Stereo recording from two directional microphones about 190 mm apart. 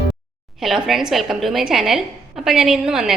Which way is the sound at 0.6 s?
Centre (ahead or behind).